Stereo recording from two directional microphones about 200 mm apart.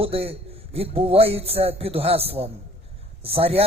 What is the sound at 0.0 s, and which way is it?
A man's voice, 30° right (ahead or behind).